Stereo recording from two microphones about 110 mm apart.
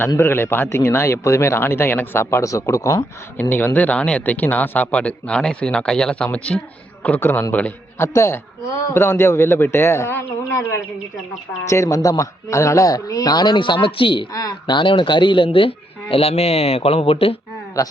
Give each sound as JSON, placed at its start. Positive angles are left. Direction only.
{"t": 0.2, "sound": "speech", "side_deg": 20}
{"t": 3.5, "sound": "a man's voice", "side_deg": 15}
{"t": 8.0, "sound": "speech", "side_deg": 25}
{"t": 11.6, "sound": "a man's voice", "side_deg": 25}
{"t": 14.3, "sound": "a man's voice", "side_deg": 35}
{"t": 14.8, "sound": "speech", "side_deg": 45}